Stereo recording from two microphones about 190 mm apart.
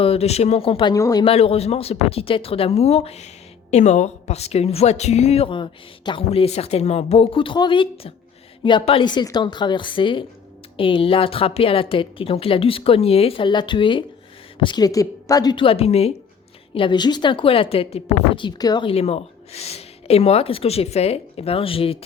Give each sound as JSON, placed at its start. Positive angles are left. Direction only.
{"t": 0.0, "sound": "a woman's voice", "side_deg": 30}
{"t": 1.2, "sound": "a woman's voice", "side_deg": 30}